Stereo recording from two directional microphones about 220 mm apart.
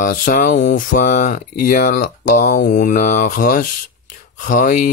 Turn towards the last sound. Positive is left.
turn(degrees=35)  # may be behind; listen again after turning